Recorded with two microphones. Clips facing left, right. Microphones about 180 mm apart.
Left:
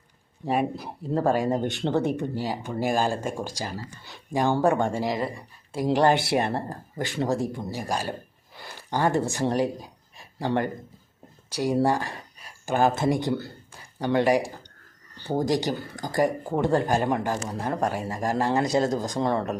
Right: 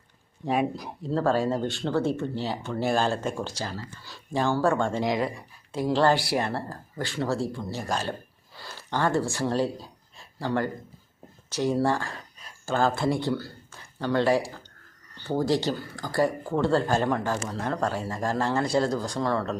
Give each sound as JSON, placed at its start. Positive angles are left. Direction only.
{"t": 0.4, "sound": "speech", "side_deg": 5}
{"t": 1.1, "sound": "speech", "side_deg": 15}
{"t": 5.0, "sound": "speech", "side_deg": 0}
{"t": 5.8, "sound": "speech", "side_deg": 15}
{"t": 8.5, "sound": "a sound", "side_deg": 15}
{"t": 11.5, "sound": "speech", "side_deg": 15}